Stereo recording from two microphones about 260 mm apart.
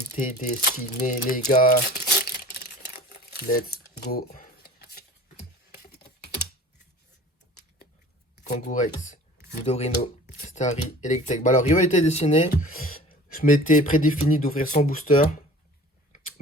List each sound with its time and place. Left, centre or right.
0.3 s a sound: left
5.7 s computer keyboard: left
8.4 s speech: left